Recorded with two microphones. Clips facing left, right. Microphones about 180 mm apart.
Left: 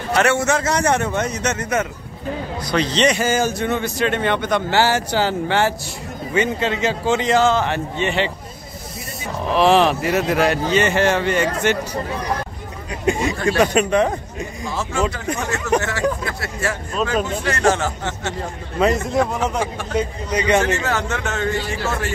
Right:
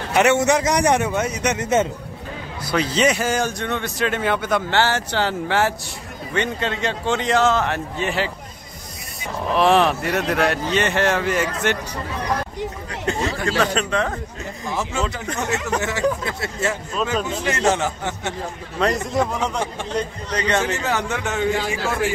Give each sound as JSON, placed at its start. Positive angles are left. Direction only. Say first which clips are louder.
{"t": 0.1, "sound": "a man's voice", "louder": "right 1 dB", "side_deg": -20}
{"t": 4.7, "sound": "speech", "louder": "left 4 dB", "side_deg": 10}
{"t": 9.5, "sound": "speech", "louder": "left 2 dB", "side_deg": 0}
{"t": 13.0, "sound": "a man's voice", "louder": "left 4 dB", "side_deg": 10}
{"t": 15.8, "sound": "speech", "louder": "even", "side_deg": -15}
{"t": 17.0, "sound": "speech", "louder": "left 2 dB", "side_deg": 0}
{"t": 17.5, "sound": "a man's voice", "louder": "left 1 dB", "side_deg": -20}
{"t": 18.4, "sound": "a man's voice", "louder": "left 4 dB", "side_deg": 0}
{"t": 20.6, "sound": "a man's voice", "louder": "left 2 dB", "side_deg": -15}